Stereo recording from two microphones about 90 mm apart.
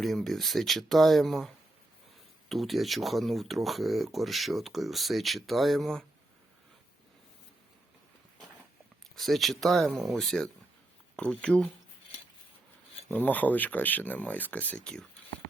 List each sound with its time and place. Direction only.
0.0 s speech: centre (ahead or behind)
9.1 s speech: centre (ahead or behind)
13.1 s speech: 20° left (ahead or behind)